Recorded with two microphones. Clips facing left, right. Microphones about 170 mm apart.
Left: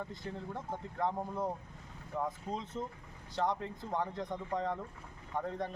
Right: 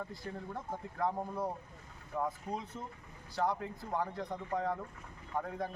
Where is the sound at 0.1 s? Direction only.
Centre (ahead or behind).